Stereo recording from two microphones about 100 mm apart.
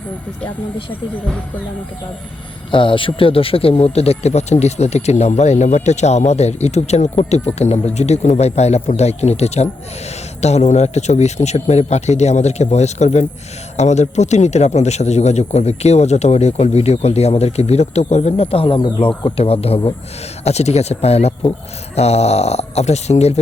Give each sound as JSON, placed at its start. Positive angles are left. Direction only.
{"t": 2.7, "sound": "a man's voice", "side_deg": 55}